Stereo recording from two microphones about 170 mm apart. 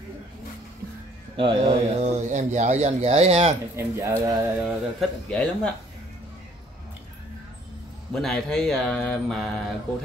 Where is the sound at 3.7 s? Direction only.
15° right (ahead or behind).